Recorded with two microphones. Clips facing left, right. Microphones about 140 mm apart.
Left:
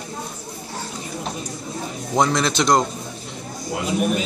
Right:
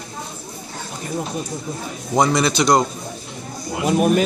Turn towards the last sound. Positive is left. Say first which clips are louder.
# right 4 dB
turn(degrees=-55)  # may be behind; listen again after turning